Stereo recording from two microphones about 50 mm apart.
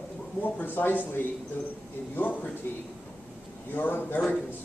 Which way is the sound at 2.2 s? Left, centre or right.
Left.